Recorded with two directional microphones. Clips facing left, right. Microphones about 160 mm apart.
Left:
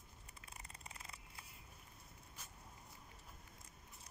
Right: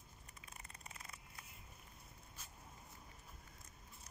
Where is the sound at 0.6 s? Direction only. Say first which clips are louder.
Left 1 dB; 25° left (ahead or behind).